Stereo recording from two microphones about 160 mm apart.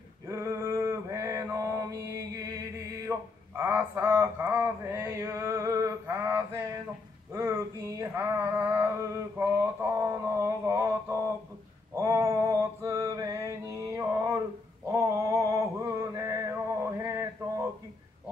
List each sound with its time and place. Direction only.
0.3 s mantra: 15° right (ahead or behind)
3.1 s speech: 15° right (ahead or behind)
7.3 s a sound: 15° right (ahead or behind)
11.9 s mantra: 20° right (ahead or behind)
14.9 s a sound: 20° right (ahead or behind)
17.0 s mantra: 20° right (ahead or behind)